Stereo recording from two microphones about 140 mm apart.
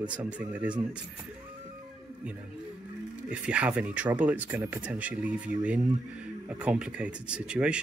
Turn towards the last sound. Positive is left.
turn(degrees=-5)  # may be behind; listen again after turning